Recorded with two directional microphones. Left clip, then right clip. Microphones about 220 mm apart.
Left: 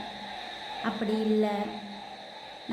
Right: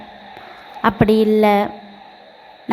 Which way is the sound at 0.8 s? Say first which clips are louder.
Right 17 dB; 45° right (ahead or behind).